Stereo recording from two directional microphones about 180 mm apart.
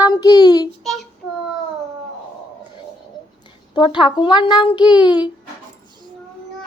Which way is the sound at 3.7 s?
25° left (ahead or behind).